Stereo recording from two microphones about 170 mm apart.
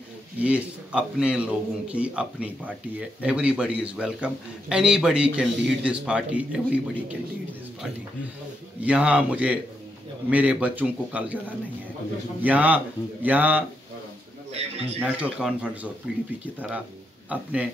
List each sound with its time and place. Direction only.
0.4 s a man's voice: 5° right (ahead or behind)
8.8 s a man's voice: 5° right (ahead or behind)
12.4 s a man's voice: 10° right (ahead or behind)
14.5 s a man's voice: 40° right (ahead or behind)
15.0 s a man's voice: 5° right (ahead or behind)